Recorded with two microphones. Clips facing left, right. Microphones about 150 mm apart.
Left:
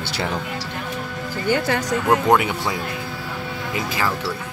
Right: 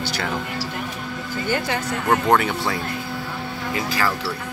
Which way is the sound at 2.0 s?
Centre (ahead or behind).